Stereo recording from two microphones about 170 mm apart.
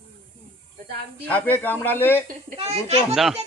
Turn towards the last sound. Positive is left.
turn(degrees=0)  # may be behind; listen again after turning